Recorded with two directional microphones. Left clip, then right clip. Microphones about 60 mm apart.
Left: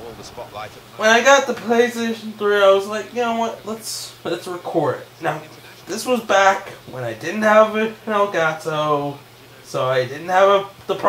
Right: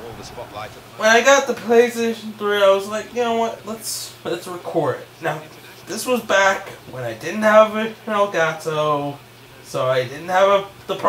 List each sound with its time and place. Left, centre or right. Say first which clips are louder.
0.9 s speech: even; right
2.9 s speech: right 1 dB; right
8.7 s speech: even; centre
9.7 s speech: even; right